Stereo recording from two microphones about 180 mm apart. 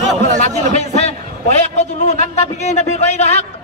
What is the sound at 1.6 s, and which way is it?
A man's voice, 40° left (ahead or behind).